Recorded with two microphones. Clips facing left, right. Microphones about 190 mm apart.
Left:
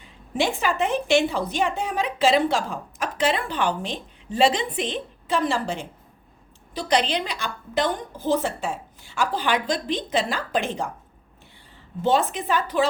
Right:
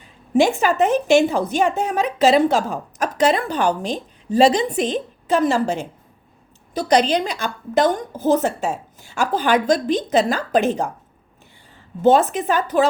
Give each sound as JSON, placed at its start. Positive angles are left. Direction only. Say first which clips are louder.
{"t": 0.3, "sound": "a woman's voice", "louder": "right 7 dB", "side_deg": -45}
{"t": 12.0, "sound": "a woman's voice", "louder": "right 7 dB", "side_deg": -45}